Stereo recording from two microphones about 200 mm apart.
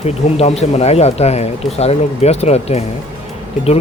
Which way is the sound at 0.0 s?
30° left (ahead or behind).